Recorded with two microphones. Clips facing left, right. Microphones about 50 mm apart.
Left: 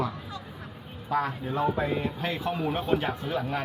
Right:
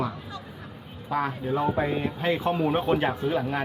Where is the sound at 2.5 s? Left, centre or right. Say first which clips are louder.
Right 3 dB; right.